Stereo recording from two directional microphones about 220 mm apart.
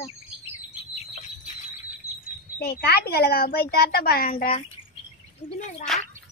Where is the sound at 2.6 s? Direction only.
45° left (ahead or behind).